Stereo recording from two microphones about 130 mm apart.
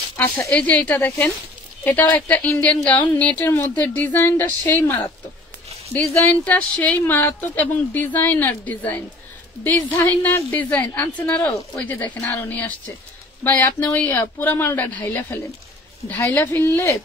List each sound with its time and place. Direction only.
0.2 s a woman's voice: 10° left (ahead or behind)
6.1 s a woman's voice: 15° left (ahead or behind)
13.9 s a woman's voice: 15° left (ahead or behind)